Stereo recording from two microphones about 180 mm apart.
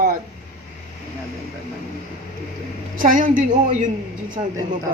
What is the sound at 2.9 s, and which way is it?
Speech, 50° right (ahead or behind).